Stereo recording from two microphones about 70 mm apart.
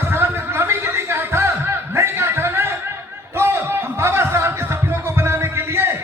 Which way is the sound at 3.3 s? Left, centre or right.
Right.